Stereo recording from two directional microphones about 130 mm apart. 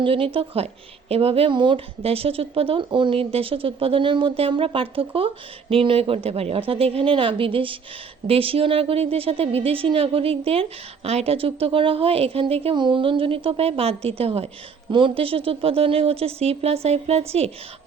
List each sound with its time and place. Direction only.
0.0 s speech: 45° right (ahead or behind)
14.8 s speech: 40° right (ahead or behind)